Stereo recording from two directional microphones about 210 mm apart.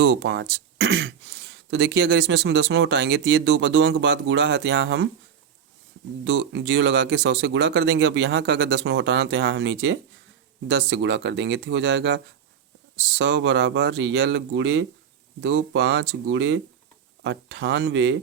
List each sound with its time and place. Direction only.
0.0 s speech: 55° right (ahead or behind)
6.2 s speech: 55° right (ahead or behind)